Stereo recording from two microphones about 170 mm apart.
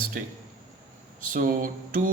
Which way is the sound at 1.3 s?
55° right (ahead or behind).